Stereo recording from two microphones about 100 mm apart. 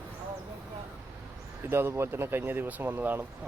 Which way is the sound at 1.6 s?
25° right (ahead or behind).